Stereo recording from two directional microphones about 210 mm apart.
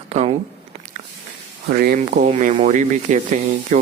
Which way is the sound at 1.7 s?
45° right (ahead or behind).